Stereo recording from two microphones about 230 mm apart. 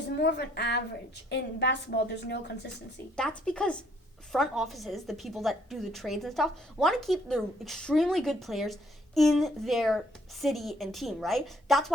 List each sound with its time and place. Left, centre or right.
0.2 s a woman's voice: left
3.2 s a woman's voice: centre